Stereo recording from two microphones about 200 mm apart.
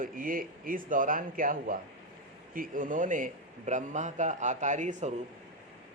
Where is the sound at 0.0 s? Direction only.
45° right (ahead or behind).